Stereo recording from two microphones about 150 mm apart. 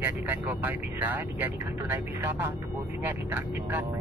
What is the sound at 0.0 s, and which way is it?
Speech, 10° right (ahead or behind).